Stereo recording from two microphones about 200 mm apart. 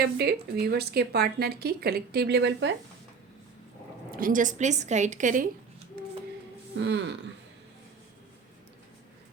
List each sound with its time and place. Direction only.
0.2 s a woman's voice: 50° right (ahead or behind)
4.2 s a woman's voice: 40° right (ahead or behind)
6.7 s speech: 65° right (ahead or behind)